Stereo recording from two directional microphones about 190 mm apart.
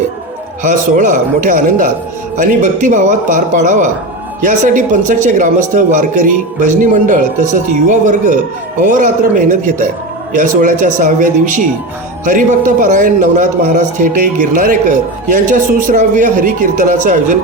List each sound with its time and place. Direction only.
0.6 s a man's voice: 40° right (ahead or behind)